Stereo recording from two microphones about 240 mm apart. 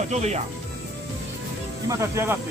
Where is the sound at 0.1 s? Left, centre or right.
Right.